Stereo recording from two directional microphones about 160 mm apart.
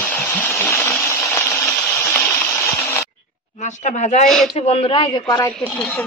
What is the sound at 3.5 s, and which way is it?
Speech, 45° left (ahead or behind).